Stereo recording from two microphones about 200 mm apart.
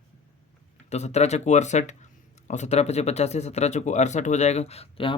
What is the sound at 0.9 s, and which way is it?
Speech, 35° left (ahead or behind).